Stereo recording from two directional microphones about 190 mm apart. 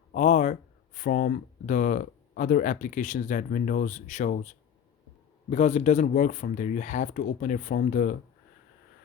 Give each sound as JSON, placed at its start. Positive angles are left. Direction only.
{"t": 0.1, "sound": "a sound", "side_deg": 40}
{"t": 0.9, "sound": "speech", "side_deg": 45}
{"t": 5.5, "sound": "speech", "side_deg": 35}